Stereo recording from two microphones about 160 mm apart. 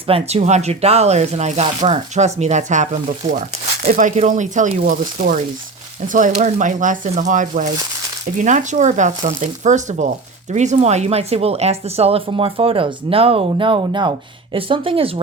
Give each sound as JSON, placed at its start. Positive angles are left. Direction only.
{"t": 0.1, "sound": "speech", "side_deg": -40}